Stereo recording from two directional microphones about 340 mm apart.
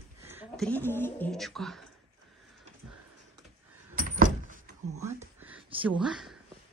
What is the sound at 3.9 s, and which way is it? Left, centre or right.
Door, right.